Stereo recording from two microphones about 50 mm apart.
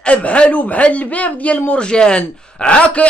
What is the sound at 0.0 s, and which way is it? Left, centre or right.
Speech, left.